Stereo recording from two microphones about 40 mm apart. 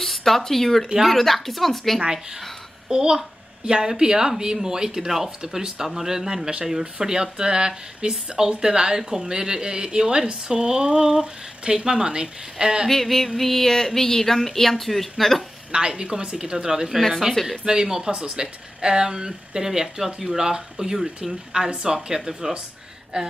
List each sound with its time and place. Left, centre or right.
0.0 s a woman's voice: centre
2.9 s a child's voice: centre
12.9 s a woman's voice: centre
15.7 s speech: right
17.1 s a woman's voice: centre
17.6 s a child's voice: centre
21.6 s speech: right
21.9 s a child's voice: centre